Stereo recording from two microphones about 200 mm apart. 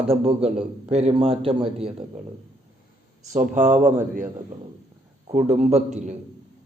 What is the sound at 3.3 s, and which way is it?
Speech, 40° right (ahead or behind).